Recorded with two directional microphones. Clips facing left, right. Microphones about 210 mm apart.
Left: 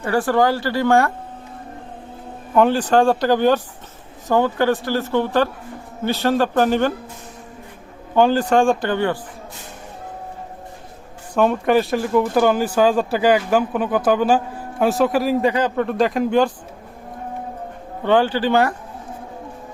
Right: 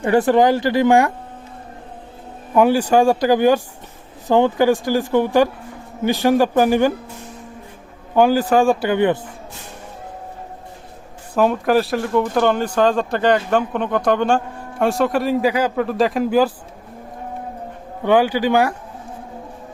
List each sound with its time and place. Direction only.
0.0 s speech: 20° right (ahead or behind)
2.6 s speech: 10° right (ahead or behind)
8.1 s speech: 10° right (ahead or behind)
11.3 s speech: centre (ahead or behind)
18.0 s speech: 10° right (ahead or behind)